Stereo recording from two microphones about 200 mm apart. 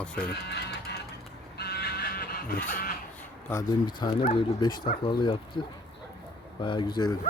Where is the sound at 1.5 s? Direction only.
55° left (ahead or behind).